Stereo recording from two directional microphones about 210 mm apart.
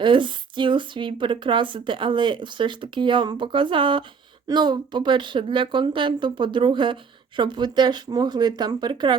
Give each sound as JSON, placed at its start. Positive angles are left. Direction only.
{"t": 0.0, "sound": "speech", "side_deg": -25}